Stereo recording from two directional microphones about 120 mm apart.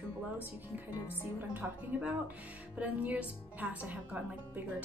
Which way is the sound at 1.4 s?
15° right (ahead or behind).